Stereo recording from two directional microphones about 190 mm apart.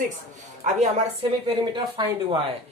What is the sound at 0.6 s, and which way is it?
Speech, 40° right (ahead or behind).